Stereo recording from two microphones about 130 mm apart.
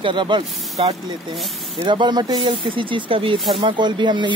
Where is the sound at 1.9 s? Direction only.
35° right (ahead or behind).